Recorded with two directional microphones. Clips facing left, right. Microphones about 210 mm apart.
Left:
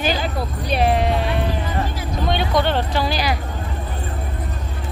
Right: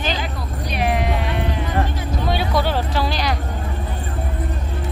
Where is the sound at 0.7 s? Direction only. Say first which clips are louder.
Left 3 dB; 30° left (ahead or behind).